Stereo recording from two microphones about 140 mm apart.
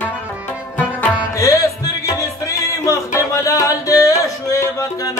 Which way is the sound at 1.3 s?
25° left (ahead or behind).